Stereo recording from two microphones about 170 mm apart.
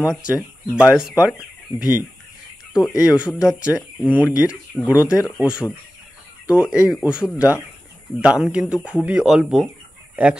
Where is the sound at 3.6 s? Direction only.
5° right (ahead or behind).